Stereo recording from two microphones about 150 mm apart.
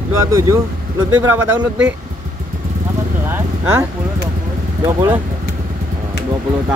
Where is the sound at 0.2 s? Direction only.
20° right (ahead or behind).